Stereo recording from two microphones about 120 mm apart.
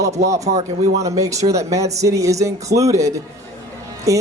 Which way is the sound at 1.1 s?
25° right (ahead or behind).